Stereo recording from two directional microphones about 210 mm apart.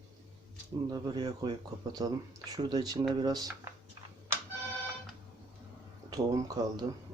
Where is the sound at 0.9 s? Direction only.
20° right (ahead or behind).